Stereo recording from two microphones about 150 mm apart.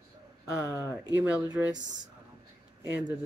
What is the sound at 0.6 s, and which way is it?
Speech, 20° left (ahead or behind).